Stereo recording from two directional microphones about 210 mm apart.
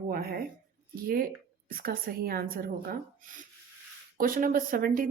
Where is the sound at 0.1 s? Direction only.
45° right (ahead or behind).